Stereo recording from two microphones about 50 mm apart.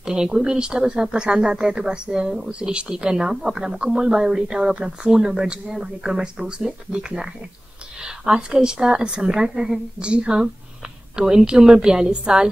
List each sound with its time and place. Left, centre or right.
0.0 s speech: centre
8.0 s a sound: centre
8.6 s speech: centre